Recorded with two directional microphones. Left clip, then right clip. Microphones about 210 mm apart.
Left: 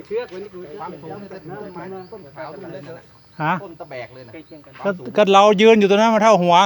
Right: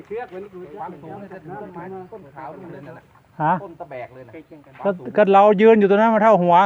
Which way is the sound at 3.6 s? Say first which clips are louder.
Even; 15° left (ahead or behind).